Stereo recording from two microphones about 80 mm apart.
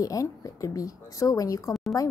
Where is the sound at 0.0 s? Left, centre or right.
Left.